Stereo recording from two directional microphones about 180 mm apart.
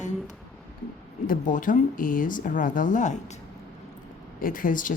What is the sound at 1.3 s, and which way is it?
Speech, 45° left (ahead or behind).